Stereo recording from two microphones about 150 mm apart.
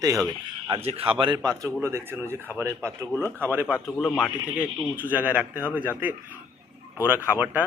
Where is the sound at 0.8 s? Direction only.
40° right (ahead or behind).